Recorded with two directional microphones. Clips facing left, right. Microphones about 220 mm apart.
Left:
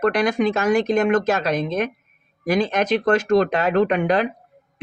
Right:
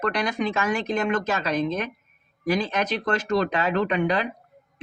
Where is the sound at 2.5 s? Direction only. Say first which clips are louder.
Left 5 dB; 50° left (ahead or behind).